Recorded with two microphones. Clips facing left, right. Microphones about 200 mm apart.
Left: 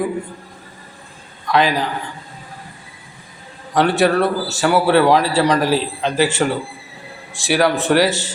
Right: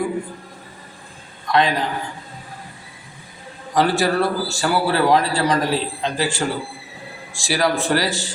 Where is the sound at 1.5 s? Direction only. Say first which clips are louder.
Left 2 dB; centre (ahead or behind).